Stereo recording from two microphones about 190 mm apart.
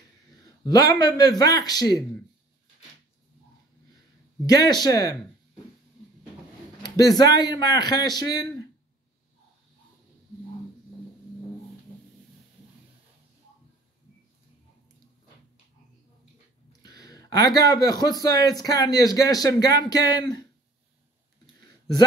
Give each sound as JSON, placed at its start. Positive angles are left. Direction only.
{"t": 0.7, "sound": "a man's voice", "side_deg": 20}
{"t": 4.5, "sound": "a man's voice", "side_deg": 20}
{"t": 6.8, "sound": "a sound", "side_deg": 20}
{"t": 7.3, "sound": "a man's voice", "side_deg": 20}
{"t": 16.8, "sound": "a sound", "side_deg": 20}
{"t": 17.6, "sound": "a man's voice", "side_deg": 20}